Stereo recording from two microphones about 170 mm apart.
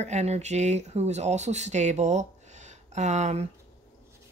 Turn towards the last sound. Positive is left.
turn(degrees=-40)  # may be behind; listen again after turning